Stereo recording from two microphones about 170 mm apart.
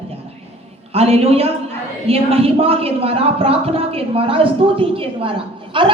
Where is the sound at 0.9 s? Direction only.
35° right (ahead or behind).